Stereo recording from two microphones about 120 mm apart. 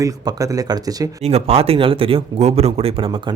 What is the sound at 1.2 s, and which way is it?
Speech, 60° right (ahead or behind).